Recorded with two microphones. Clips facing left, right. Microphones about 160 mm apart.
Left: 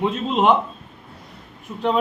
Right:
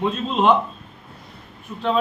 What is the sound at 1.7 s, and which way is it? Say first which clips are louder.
Speech: left 1 dB; 20° left (ahead or behind).